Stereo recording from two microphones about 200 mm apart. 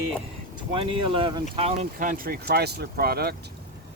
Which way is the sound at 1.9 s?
45° right (ahead or behind).